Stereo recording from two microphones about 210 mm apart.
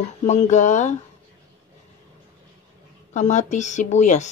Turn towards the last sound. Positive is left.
turn(degrees=35)  # may be behind; listen again after turning